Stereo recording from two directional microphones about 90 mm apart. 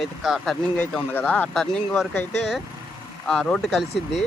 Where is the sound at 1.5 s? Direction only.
10° left (ahead or behind).